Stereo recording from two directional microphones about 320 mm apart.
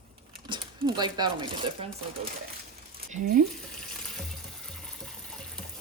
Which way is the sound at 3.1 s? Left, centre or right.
Right.